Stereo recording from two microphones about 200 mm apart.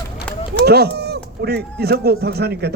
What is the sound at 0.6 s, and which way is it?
A man's voice, 55° right (ahead or behind).